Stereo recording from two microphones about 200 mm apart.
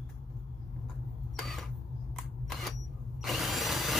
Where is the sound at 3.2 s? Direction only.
Centre (ahead or behind).